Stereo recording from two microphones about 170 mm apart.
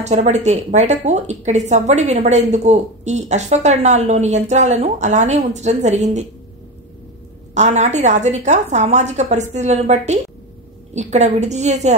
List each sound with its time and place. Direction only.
0.0 s a woman's voice: 45° right (ahead or behind)
7.5 s a woman's voice: 45° right (ahead or behind)